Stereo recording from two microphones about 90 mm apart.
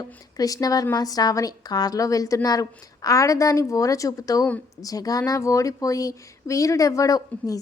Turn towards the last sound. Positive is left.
turn(degrees=40)  # may be behind; listen again after turning